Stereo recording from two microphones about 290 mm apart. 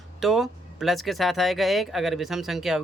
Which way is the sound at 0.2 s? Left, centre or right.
Centre.